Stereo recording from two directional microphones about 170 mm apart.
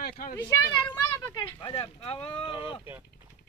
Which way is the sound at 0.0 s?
60° left (ahead or behind).